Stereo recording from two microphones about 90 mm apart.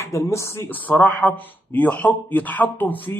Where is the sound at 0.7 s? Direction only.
20° left (ahead or behind).